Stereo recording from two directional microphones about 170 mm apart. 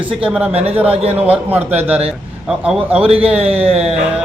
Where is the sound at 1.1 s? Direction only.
10° right (ahead or behind).